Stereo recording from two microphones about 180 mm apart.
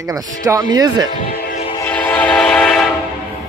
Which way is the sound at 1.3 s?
45° left (ahead or behind).